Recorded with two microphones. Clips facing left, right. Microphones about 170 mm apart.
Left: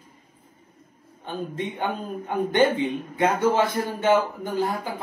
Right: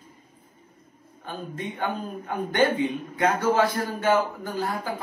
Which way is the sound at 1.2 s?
20° left (ahead or behind).